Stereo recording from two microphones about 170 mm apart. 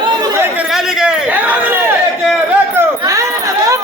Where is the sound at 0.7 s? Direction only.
5° right (ahead or behind).